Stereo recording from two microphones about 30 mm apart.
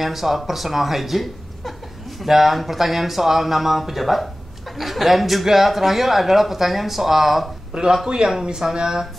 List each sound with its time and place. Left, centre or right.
0.0 s speech: centre
0.5 s chuckle: centre
2.2 s speech: centre
7.7 s speech: right